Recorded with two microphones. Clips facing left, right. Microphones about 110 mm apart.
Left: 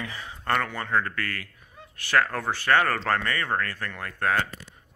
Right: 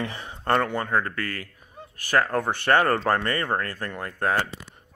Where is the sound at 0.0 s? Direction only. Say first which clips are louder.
Right 4 dB; 50° right (ahead or behind).